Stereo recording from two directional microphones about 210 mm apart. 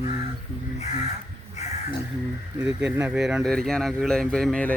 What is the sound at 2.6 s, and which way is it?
Speech, 5° right (ahead or behind).